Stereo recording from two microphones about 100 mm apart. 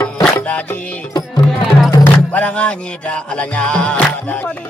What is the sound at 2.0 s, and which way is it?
Music, 15° left (ahead or behind).